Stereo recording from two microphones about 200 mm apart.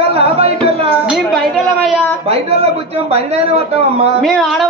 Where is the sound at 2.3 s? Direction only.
30° right (ahead or behind).